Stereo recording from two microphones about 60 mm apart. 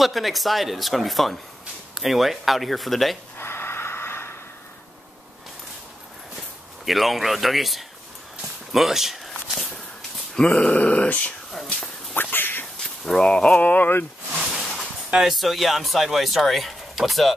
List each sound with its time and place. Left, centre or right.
0.0 s speech: centre
3.3 s snort: left
6.9 s speech: centre
8.4 s walk: centre
10.5 s speech: left
12.2 s quack: left
13.0 s speech: centre; by 14.0 s left
14.5 s a sound: centre
15.1 s speech: centre